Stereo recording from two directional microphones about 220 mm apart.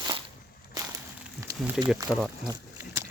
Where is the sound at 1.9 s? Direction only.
15° right (ahead or behind).